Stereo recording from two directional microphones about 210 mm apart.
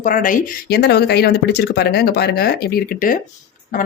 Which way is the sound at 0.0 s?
40° left (ahead or behind).